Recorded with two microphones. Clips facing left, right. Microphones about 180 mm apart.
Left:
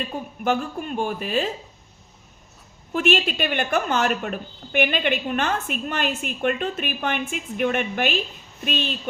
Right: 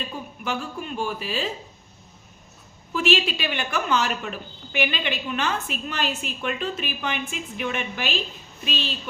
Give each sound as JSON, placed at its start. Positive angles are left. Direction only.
{"t": 0.1, "sound": "a woman's voice", "side_deg": 55}
{"t": 2.9, "sound": "a woman's voice", "side_deg": 55}